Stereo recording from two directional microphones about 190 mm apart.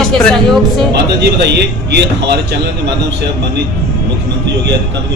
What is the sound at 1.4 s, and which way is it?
Speech, 60° right (ahead or behind).